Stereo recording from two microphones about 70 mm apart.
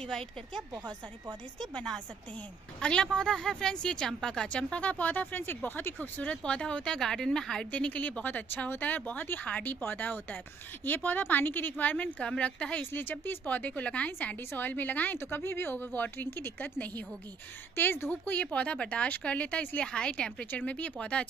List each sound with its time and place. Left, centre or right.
2.8 s a woman's voice: centre
7.7 s a woman's voice: centre
12.9 s a woman's voice: left